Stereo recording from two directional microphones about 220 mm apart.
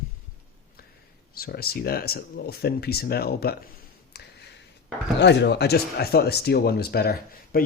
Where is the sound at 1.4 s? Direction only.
45° left (ahead or behind).